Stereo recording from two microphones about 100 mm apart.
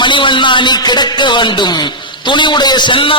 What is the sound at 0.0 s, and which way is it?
A man's voice, 55° left (ahead or behind).